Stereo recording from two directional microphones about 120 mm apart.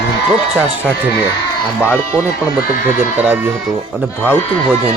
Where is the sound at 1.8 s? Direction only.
15° left (ahead or behind).